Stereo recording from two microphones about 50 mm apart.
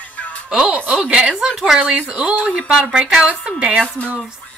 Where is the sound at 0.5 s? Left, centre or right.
Centre.